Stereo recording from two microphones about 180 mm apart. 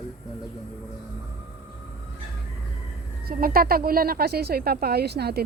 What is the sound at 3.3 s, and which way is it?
Speech, 55° right (ahead or behind).